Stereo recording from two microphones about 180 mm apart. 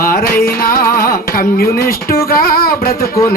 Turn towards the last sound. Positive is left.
turn(degrees=55)  # may be behind; listen again after turning